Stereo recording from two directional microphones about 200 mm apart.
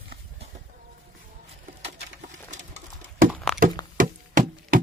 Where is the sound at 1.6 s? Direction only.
35° right (ahead or behind).